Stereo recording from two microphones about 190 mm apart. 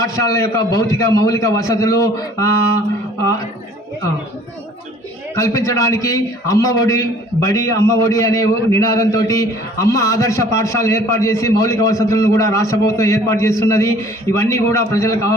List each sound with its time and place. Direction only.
0.3 s a man's voice: 15° left (ahead or behind)
5.4 s a man's voice: 15° left (ahead or behind)